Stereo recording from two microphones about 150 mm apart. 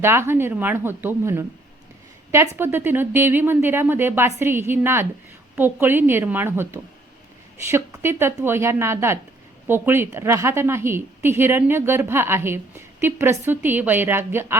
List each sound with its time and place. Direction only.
0.0 s a woman's voice: 15° right (ahead or behind)
2.6 s a woman's voice: 15° right (ahead or behind)